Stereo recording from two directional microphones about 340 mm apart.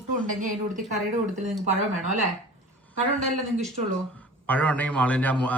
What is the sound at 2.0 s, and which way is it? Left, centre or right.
Speech, right.